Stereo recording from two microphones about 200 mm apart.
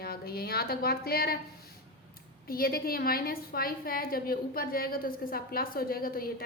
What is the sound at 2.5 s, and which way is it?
A woman's voice, 50° left (ahead or behind).